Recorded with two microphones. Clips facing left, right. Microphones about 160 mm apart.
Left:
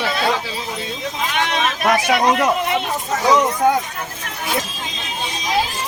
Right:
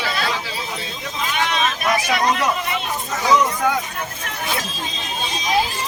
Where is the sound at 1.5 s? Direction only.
60° left (ahead or behind).